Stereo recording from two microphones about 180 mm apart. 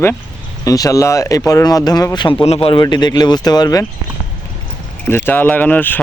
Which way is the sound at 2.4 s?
35° left (ahead or behind).